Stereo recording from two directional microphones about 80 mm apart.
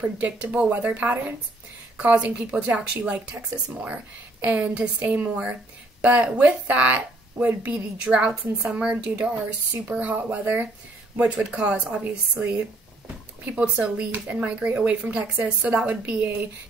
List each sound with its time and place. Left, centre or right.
0.2 s a woman's voice: centre